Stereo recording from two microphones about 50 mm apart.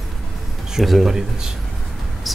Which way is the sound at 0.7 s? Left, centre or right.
Centre.